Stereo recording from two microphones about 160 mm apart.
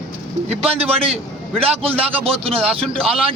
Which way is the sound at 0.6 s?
40° right (ahead or behind).